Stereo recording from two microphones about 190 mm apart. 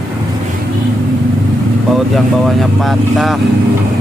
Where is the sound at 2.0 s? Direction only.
Centre (ahead or behind).